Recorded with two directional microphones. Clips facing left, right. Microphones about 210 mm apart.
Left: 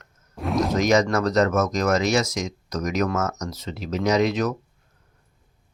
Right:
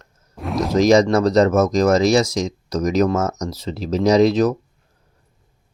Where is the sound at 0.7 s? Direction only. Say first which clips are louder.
Right 8 dB; 35° right (ahead or behind).